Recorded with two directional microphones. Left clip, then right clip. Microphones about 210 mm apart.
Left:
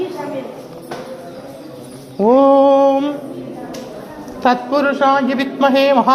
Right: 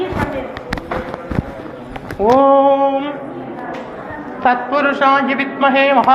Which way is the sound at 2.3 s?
75° left (ahead or behind).